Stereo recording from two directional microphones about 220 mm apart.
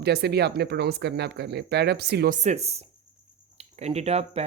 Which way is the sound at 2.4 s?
30° right (ahead or behind).